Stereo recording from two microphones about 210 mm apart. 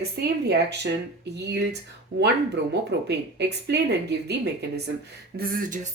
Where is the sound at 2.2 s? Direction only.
55° right (ahead or behind).